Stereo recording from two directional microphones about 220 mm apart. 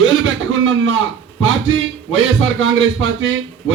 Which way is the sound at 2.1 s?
60° right (ahead or behind).